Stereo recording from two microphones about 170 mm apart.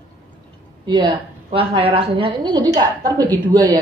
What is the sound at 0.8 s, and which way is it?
A woman's voice, 30° right (ahead or behind).